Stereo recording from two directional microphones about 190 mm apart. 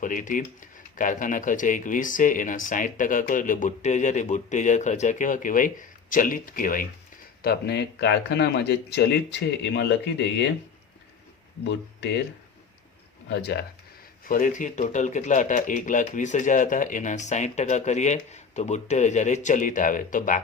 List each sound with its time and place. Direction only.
0.0 s speech: 45° left (ahead or behind)
7.4 s a man's voice: 60° left (ahead or behind)
11.7 s speech: 65° left (ahead or behind)
13.3 s a man's voice: 60° left (ahead or behind)
14.3 s speech: 45° left (ahead or behind)